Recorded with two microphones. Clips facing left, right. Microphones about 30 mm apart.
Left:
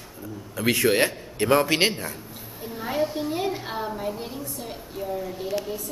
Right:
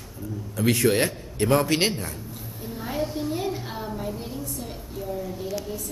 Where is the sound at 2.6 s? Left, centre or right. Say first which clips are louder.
Left 3 dB; centre.